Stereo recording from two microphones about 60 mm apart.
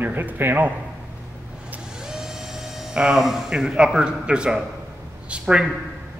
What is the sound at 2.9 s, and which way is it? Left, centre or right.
Speech, centre.